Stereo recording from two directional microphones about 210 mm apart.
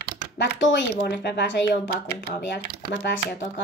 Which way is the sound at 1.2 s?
50° left (ahead or behind).